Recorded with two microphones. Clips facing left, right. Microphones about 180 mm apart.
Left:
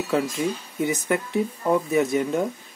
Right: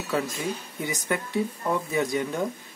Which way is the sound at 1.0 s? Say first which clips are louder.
Left 3 dB; 20° left (ahead or behind).